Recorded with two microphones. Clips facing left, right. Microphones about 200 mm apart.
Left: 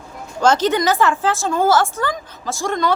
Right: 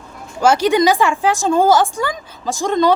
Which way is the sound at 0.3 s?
10° right (ahead or behind).